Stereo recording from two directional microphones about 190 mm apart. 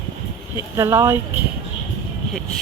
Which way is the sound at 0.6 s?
15° right (ahead or behind).